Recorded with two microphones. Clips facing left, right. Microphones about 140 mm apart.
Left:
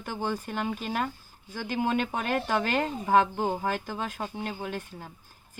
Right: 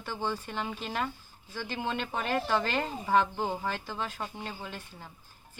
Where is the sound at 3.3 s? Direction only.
15° left (ahead or behind).